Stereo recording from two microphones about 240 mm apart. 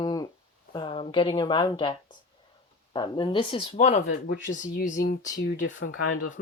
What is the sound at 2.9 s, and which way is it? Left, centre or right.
Speech, centre.